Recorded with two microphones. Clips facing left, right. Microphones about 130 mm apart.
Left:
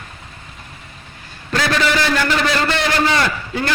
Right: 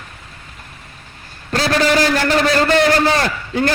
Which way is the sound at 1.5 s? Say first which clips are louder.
Right 3 dB; 35° right (ahead or behind).